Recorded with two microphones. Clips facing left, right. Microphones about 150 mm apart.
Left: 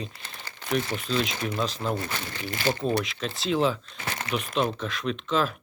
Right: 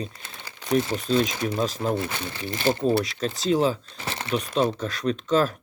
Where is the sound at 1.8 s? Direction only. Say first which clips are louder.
Right 4 dB; centre (ahead or behind).